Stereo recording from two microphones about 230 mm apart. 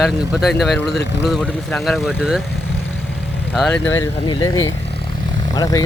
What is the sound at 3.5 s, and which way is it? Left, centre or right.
Speech, centre.